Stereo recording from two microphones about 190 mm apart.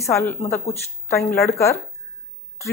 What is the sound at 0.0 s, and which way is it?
Speech, 15° left (ahead or behind).